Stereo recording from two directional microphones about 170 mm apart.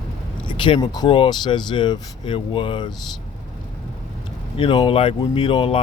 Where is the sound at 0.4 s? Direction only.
30° left (ahead or behind).